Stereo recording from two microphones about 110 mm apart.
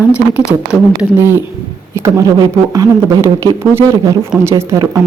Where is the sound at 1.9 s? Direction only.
25° right (ahead or behind).